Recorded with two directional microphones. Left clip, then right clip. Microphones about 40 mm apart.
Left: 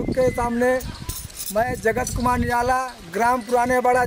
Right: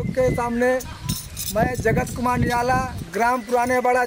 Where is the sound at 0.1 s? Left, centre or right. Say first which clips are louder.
Even; centre.